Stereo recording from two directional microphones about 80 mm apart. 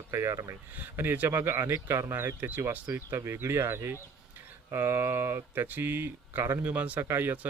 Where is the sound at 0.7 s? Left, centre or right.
Right.